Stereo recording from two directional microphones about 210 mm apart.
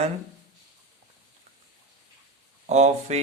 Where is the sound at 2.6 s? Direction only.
35° right (ahead or behind).